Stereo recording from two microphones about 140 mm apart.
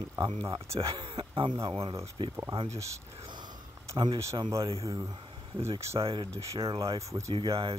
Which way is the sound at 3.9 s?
35° right (ahead or behind).